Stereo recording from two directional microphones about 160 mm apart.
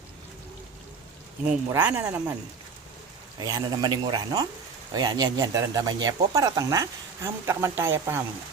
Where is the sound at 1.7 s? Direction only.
15° right (ahead or behind).